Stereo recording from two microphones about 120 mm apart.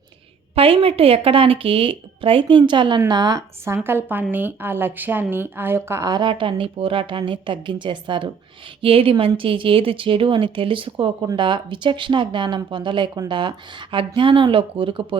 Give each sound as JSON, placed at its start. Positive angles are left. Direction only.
{"t": 0.5, "sound": "speech", "side_deg": -50}
{"t": 3.8, "sound": "speech", "side_deg": -15}